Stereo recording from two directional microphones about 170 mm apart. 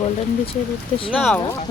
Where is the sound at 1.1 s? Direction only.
Centre (ahead or behind).